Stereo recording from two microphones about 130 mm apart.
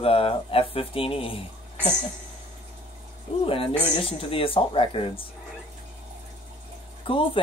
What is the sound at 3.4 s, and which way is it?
Speech, 45° left (ahead or behind).